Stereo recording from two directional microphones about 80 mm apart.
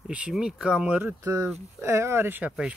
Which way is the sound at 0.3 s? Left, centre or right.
Centre.